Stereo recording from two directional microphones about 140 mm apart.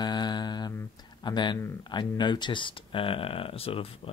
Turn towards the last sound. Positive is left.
turn(degrees=40)  # may be behind; listen again after turning